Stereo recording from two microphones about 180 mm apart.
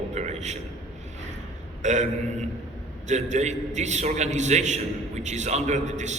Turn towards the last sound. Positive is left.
turn(degrees=-40)  # may be behind; listen again after turning